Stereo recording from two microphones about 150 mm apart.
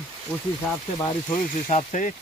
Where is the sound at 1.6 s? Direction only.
50° left (ahead or behind).